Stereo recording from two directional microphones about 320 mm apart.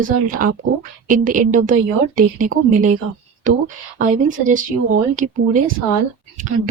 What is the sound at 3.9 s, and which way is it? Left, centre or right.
A woman's voice, right.